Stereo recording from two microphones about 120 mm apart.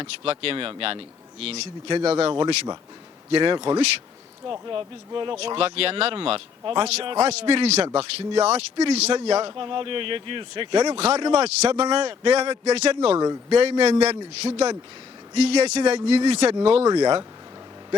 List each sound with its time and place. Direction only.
0.0 s speech: 50° right (ahead or behind)
3.3 s speech: 45° right (ahead or behind)
8.8 s speech: 60° right (ahead or behind)
9.1 s speech: 50° right (ahead or behind)
10.9 s speech: 55° right (ahead or behind)
13.1 s speech: 30° right (ahead or behind)
13.5 s speech: 60° right (ahead or behind)
16.9 s speech: 35° right (ahead or behind)